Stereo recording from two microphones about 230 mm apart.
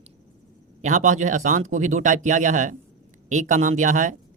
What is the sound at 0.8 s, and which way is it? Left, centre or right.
Speech, right.